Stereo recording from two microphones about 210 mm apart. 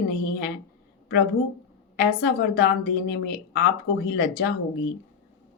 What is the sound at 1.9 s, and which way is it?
A woman's voice, 50° left (ahead or behind).